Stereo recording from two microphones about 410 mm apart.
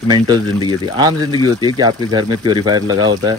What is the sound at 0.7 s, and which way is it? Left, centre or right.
Speech, centre.